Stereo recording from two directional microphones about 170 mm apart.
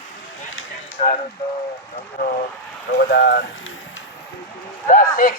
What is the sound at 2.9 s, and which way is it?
Speech, 75° left (ahead or behind).